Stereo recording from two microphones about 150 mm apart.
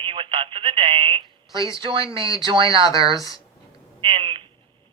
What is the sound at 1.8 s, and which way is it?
Speech, 35° right (ahead or behind).